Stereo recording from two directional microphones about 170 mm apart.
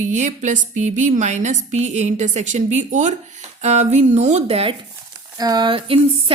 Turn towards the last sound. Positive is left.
turn(degrees=-30)  # may be behind; listen again after turning